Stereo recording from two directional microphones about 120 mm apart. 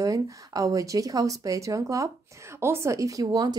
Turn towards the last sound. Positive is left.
turn(degrees=-35)  # may be behind; listen again after turning